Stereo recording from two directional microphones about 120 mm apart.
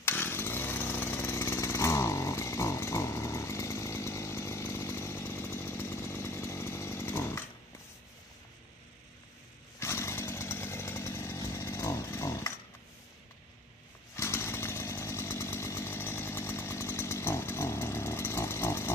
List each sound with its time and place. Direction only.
0.0 s chainsaw: 20° left (ahead or behind)
9.8 s chainsaw: 25° left (ahead or behind)
14.1 s chainsaw: 20° left (ahead or behind)